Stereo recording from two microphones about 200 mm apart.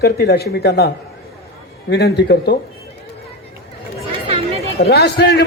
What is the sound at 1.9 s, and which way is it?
Speech, 55° left (ahead or behind).